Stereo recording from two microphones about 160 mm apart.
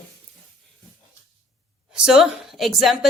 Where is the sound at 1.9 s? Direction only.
5° right (ahead or behind).